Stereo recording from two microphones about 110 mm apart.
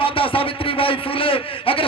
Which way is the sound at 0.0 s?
55° left (ahead or behind).